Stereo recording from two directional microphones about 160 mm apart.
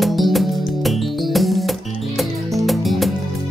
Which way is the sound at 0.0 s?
Centre (ahead or behind).